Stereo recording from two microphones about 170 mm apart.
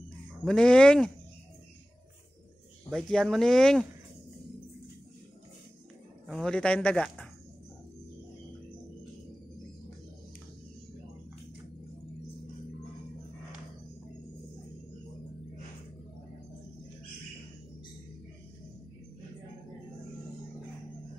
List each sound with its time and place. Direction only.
0.5 s speech: 5° left (ahead or behind)
2.9 s speech: 5° left (ahead or behind)
6.2 s speech: 5° left (ahead or behind)